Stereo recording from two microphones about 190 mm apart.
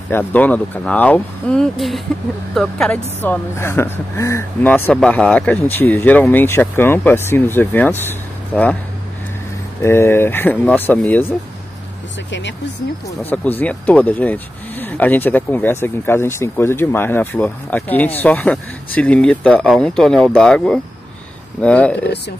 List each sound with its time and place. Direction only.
0.1 s speech: 10° left (ahead or behind)
9.8 s speech: 15° left (ahead or behind)
12.3 s speech: 70° left (ahead or behind)
13.2 s speech: 10° left (ahead or behind)